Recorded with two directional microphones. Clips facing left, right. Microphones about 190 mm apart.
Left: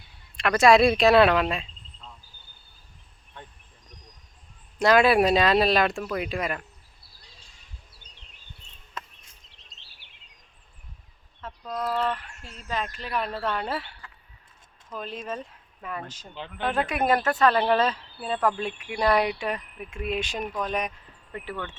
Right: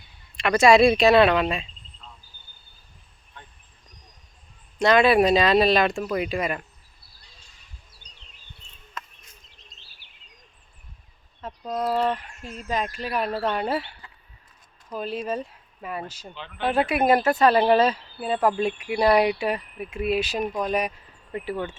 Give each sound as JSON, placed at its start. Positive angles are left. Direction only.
{"t": 0.3, "sound": "speech", "side_deg": 0}
{"t": 4.8, "sound": "speech", "side_deg": 5}
{"t": 8.1, "sound": "insect", "side_deg": 55}
{"t": 9.0, "sound": "a sound", "side_deg": 30}
{"t": 11.3, "sound": "speech", "side_deg": -20}
{"t": 12.0, "sound": "a sound", "side_deg": -15}
{"t": 12.5, "sound": "speech", "side_deg": -15}
{"t": 14.8, "sound": "speech", "side_deg": -10}